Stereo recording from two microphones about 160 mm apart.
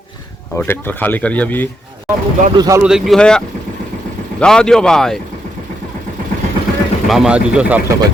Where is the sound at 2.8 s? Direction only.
5° right (ahead or behind).